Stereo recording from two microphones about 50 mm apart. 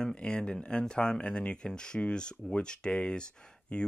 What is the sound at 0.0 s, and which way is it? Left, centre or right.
Speech, centre.